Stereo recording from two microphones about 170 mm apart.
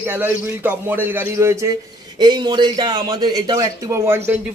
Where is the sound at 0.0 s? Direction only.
10° right (ahead or behind).